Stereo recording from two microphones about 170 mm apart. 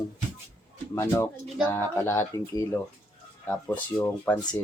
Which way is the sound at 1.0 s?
15° left (ahead or behind).